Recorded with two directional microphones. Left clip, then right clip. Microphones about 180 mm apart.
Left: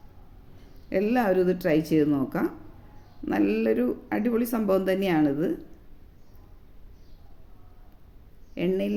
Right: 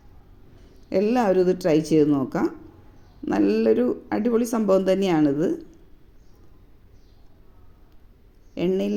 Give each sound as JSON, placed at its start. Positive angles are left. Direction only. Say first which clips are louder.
{"t": 0.9, "sound": "speech", "louder": "right 3 dB", "side_deg": -20}
{"t": 8.5, "sound": "speech", "louder": "right 3 dB", "side_deg": -20}